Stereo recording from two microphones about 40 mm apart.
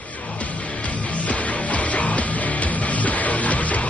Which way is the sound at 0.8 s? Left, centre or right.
Left.